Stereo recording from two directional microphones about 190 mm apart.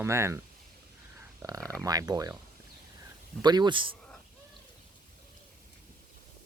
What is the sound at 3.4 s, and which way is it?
Speech, 20° right (ahead or behind).